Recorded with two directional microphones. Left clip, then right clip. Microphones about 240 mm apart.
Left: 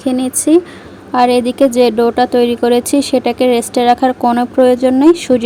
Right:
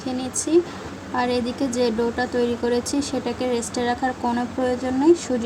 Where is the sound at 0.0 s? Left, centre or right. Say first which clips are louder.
Left 12 dB; left.